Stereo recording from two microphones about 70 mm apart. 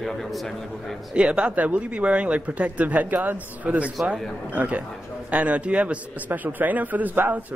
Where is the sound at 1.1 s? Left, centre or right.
Centre.